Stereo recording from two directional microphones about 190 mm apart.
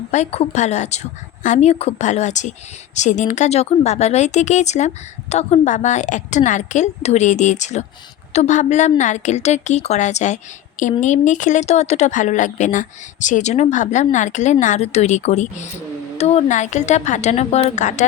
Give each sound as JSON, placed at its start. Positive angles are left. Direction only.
{"t": 0.1, "sound": "speech", "side_deg": 35}